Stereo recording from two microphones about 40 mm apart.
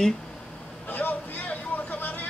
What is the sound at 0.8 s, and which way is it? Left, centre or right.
Vehicle, left.